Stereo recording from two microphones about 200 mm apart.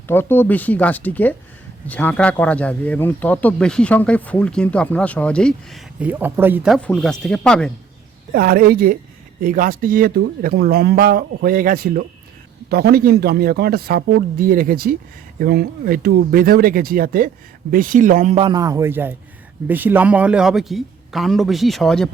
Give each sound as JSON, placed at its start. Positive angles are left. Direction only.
{"t": 0.1, "sound": "speech", "side_deg": 10}
{"t": 6.0, "sound": "a man's voice", "side_deg": -10}
{"t": 8.3, "sound": "speech", "side_deg": -45}
{"t": 18.5, "sound": "a man's voice", "side_deg": -15}